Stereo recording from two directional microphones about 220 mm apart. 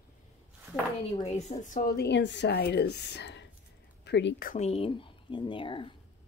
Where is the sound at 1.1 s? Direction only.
30° left (ahead or behind); by 4.5 s 50° left (ahead or behind).